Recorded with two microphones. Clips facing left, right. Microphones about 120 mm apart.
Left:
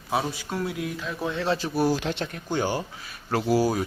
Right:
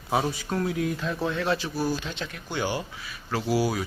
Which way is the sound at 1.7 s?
70° left (ahead or behind).